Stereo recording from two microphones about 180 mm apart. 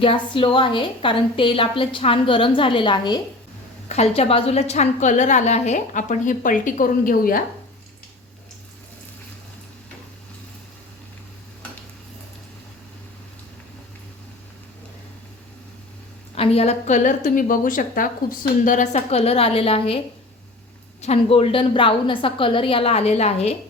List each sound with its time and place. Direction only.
0.0 s a woman's voice: 30° left (ahead or behind)
3.8 s a woman's voice: 35° left (ahead or behind)
16.3 s a woman's voice: 35° left (ahead or behind)
18.9 s a woman's voice: 35° left (ahead or behind)
21.0 s a woman's voice: 35° left (ahead or behind)